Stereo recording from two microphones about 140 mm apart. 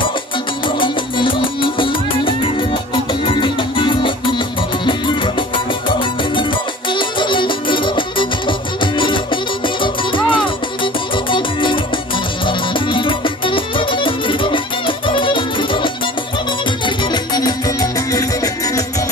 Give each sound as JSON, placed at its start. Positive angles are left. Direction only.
{"t": 0.7, "sound": "music", "side_deg": 35}